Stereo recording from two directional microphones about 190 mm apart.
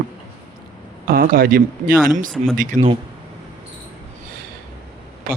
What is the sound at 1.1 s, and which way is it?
Speech, 50° right (ahead or behind).